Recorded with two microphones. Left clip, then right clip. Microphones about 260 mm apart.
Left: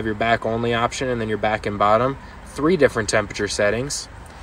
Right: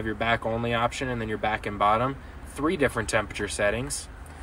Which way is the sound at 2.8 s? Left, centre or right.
Centre.